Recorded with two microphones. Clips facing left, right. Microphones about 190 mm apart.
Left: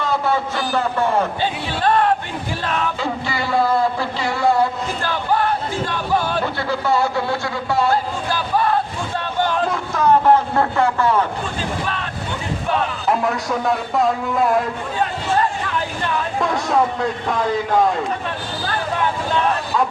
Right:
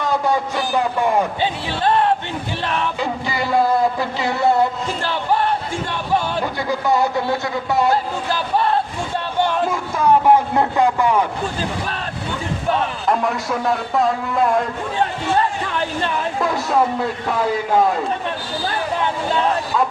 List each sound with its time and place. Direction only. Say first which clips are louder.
0.0 s a man's voice: right 1 dB; 15° right (ahead or behind)
3.0 s music: right 1 dB; 15° right (ahead or behind)
4.2 s a sound: right 1 dB; 20° right (ahead or behind)
6.4 s speech: right 1 dB; 15° right (ahead or behind)
9.6 s speech: even; 10° right (ahead or behind)
13.1 s a man's voice: even; centre (ahead or behind)
16.4 s a man's voice: even; 5° right (ahead or behind)